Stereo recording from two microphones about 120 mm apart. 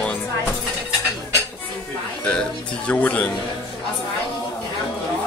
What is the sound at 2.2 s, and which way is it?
Music, 10° left (ahead or behind).